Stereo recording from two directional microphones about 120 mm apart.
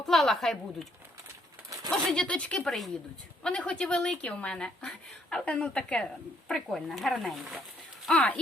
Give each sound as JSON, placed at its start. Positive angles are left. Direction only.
{"t": 0.0, "sound": "speech", "side_deg": 5}
{"t": 1.9, "sound": "speech", "side_deg": 5}
{"t": 8.0, "sound": "speech", "side_deg": 5}